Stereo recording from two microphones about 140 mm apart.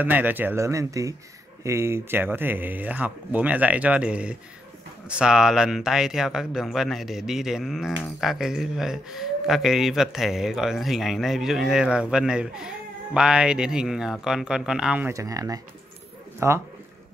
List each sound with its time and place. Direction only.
0.0 s speech: 15° right (ahead or behind)
15.1 s speech: 25° right (ahead or behind)